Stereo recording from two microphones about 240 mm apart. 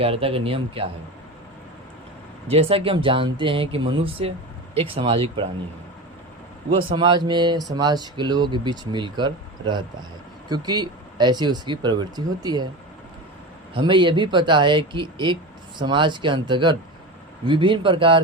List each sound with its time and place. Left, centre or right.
0.0 s speech: right
2.5 s speech: right
6.7 s speech: centre
13.7 s speech: centre